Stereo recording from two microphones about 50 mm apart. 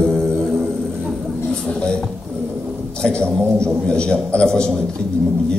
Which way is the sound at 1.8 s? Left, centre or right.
Centre.